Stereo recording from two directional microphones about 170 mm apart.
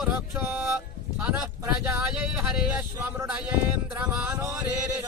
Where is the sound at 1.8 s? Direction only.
10° right (ahead or behind).